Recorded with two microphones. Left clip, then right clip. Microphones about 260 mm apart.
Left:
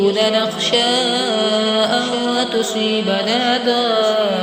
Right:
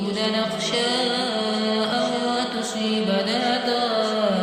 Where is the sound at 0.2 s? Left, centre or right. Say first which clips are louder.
Left 7 dB; centre.